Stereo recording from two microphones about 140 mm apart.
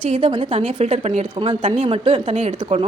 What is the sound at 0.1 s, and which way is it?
A woman's voice, 40° right (ahead or behind).